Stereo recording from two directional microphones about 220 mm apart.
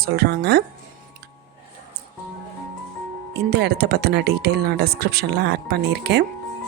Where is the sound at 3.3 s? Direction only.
50° right (ahead or behind).